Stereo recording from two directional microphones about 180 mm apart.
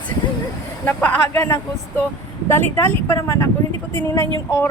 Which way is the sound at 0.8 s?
10° left (ahead or behind).